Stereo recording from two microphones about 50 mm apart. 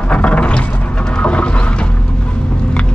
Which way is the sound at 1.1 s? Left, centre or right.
Left.